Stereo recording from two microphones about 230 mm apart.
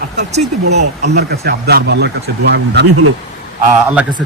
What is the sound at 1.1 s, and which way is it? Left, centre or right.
Speech, right.